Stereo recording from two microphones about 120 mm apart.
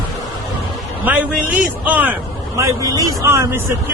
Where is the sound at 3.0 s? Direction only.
25° right (ahead or behind).